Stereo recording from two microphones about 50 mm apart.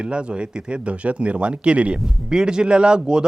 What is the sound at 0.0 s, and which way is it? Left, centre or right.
A man's voice, centre.